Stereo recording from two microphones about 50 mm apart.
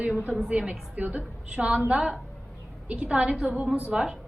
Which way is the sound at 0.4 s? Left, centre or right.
Centre.